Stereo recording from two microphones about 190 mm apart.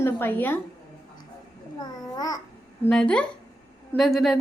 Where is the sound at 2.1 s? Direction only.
20° left (ahead or behind).